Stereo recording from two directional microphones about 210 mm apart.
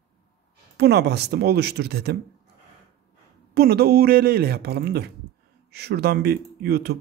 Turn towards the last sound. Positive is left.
turn(degrees=-50)  # may be behind; listen again after turning